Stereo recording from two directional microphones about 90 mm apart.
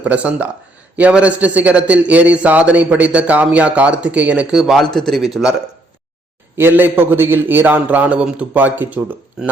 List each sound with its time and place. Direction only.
0.0 s a man's voice: 15° right (ahead or behind)
4.6 s a man's voice: centre (ahead or behind)
6.6 s a man's voice: 25° right (ahead or behind)